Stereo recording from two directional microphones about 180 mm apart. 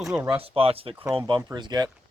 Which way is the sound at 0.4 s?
30° right (ahead or behind).